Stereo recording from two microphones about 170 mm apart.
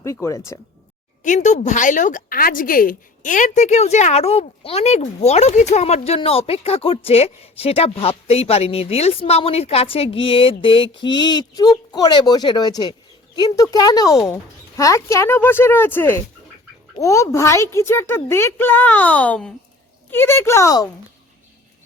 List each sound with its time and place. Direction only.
0.0 s a woman's voice: 20° left (ahead or behind)
1.2 s a woman's voice: 45° left (ahead or behind); by 20.8 s 20° left (ahead or behind)